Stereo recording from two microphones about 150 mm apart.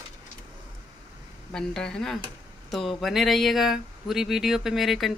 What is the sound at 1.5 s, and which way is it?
Speech, 5° left (ahead or behind).